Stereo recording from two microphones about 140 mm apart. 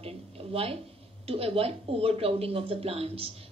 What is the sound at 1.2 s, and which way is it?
A woman's voice, 40° right (ahead or behind).